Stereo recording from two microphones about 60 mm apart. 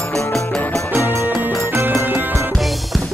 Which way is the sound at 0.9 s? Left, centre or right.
Right.